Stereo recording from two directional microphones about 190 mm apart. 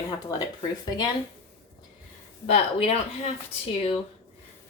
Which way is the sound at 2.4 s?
35° left (ahead or behind).